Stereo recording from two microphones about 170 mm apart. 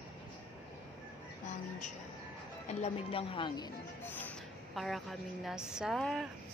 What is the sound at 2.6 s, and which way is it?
Speech, 35° left (ahead or behind).